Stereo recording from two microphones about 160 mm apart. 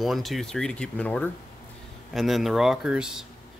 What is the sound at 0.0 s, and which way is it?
Speech, centre (ahead or behind).